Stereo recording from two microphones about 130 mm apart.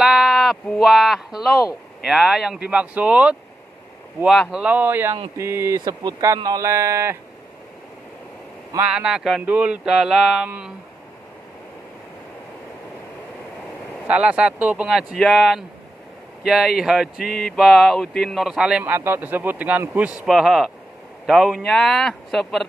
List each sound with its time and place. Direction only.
0.0 s speech: 5° right (ahead or behind)
4.5 s speech: 10° right (ahead or behind)
5.8 s speech: 35° right (ahead or behind)
8.8 s speech: 5° right (ahead or behind)
14.0 s speech: 10° right (ahead or behind)
20.2 s speech: centre (ahead or behind)